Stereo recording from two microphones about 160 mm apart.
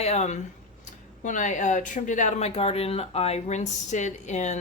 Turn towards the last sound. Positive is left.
turn(degrees=45)  # may be behind; listen again after turning